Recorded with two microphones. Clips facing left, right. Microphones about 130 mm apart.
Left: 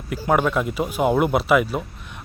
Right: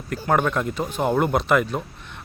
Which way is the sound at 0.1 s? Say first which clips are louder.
Left 1 dB; 5° left (ahead or behind).